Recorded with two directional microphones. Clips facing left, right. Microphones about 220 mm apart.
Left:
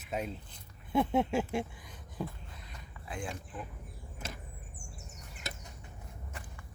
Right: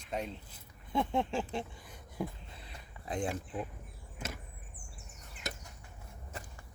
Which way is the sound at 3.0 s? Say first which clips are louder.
Right 5 dB; 35° right (ahead or behind).